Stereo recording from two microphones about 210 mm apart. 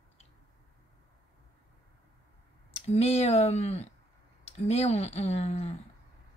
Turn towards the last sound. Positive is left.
turn(degrees=30)  # may be behind; listen again after turning